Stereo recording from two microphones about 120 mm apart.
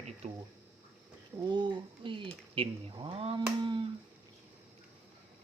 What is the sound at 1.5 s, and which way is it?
Speech, 40° right (ahead or behind).